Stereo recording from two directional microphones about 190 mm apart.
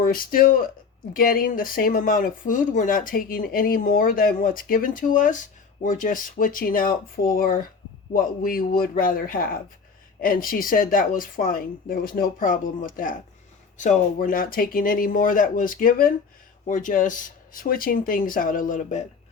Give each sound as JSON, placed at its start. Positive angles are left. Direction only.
{"t": 0.0, "sound": "speech", "side_deg": 50}